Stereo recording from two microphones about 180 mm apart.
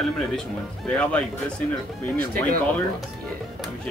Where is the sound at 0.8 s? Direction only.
5° left (ahead or behind).